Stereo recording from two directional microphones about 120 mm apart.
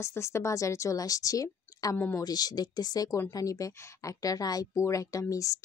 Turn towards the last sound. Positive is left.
turn(degrees=30)  # may be behind; listen again after turning